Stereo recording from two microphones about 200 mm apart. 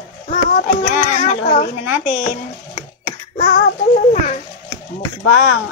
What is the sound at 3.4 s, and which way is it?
Speech, 40° left (ahead or behind).